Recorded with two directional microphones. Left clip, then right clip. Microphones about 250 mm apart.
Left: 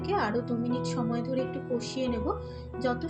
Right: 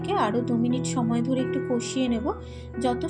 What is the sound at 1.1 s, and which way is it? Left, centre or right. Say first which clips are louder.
Speech: right 5 dB; right.